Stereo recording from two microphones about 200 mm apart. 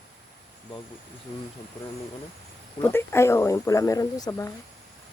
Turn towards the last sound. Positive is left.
turn(degrees=15)  # may be behind; listen again after turning